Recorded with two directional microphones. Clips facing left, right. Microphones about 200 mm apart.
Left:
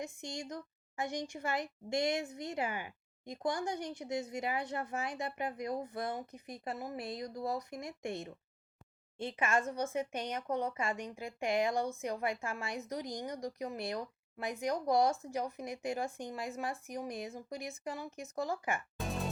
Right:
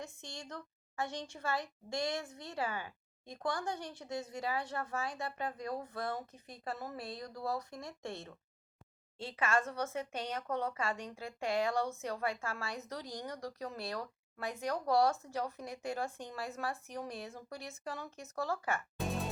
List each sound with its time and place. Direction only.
0.0 s speech: 15° left (ahead or behind)
18.9 s music: centre (ahead or behind)